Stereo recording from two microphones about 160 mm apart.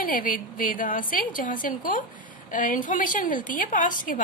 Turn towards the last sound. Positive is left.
turn(degrees=55)  # may be behind; listen again after turning